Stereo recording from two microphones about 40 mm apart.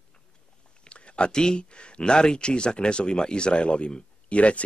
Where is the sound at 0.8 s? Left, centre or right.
Left.